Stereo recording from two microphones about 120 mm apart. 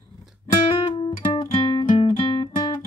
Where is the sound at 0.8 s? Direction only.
45° left (ahead or behind).